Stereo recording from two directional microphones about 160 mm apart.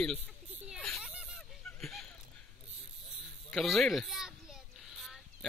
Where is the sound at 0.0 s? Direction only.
5° left (ahead or behind).